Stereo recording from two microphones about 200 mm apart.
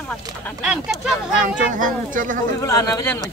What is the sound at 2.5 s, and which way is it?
Speech, 15° left (ahead or behind).